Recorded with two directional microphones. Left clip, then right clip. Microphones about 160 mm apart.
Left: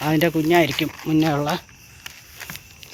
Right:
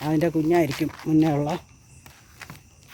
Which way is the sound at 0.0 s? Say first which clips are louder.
Left 3 dB; 5° right (ahead or behind).